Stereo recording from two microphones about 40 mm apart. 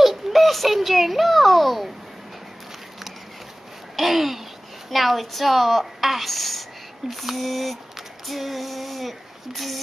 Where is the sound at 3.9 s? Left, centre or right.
Centre.